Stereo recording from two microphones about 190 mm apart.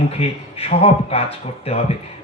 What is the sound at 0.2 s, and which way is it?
A man's voice, 30° left (ahead or behind).